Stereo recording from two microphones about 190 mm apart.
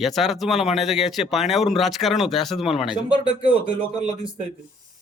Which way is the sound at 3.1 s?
25° left (ahead or behind).